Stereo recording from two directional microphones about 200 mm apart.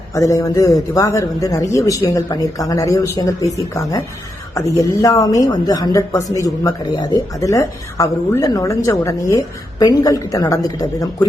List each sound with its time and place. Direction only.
0.1 s speech: 15° left (ahead or behind)
4.5 s speech: 15° left (ahead or behind)